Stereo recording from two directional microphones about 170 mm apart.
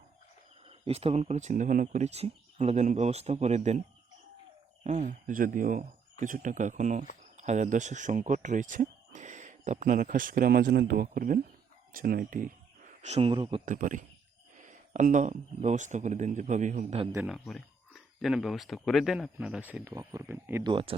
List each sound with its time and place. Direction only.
0.7 s speech: 35° right (ahead or behind)
13.7 s speech: 50° right (ahead or behind)
17.2 s speech: centre (ahead or behind)
20.7 s speech: 30° right (ahead or behind)